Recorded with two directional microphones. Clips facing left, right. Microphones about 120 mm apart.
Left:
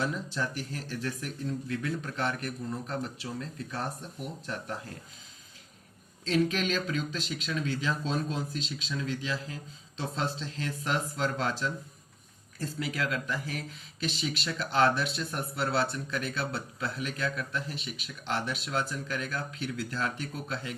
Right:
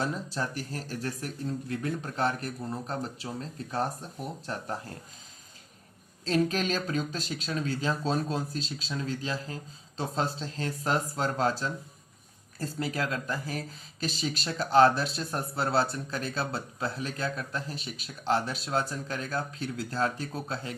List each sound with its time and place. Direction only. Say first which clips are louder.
0.0 s speech: right 1 dB; 35° right (ahead or behind)
6.2 s speech: right 1 dB; 40° right (ahead or behind)